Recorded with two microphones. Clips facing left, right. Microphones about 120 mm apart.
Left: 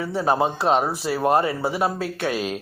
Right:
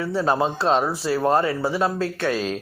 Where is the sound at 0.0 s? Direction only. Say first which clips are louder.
Even; 15° left (ahead or behind).